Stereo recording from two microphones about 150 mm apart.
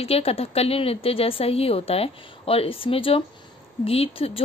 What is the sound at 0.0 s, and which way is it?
A woman's voice, 40° left (ahead or behind).